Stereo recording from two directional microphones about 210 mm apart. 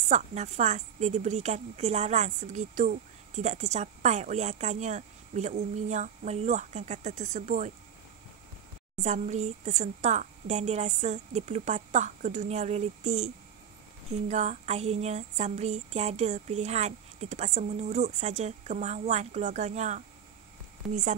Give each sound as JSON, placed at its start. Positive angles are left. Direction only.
{"t": 0.0, "sound": "a woman's voice", "side_deg": -35}
{"t": 8.9, "sound": "a woman's voice", "side_deg": -35}